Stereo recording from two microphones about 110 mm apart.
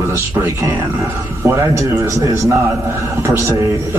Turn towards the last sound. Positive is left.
turn(degrees=-20)  # may be behind; listen again after turning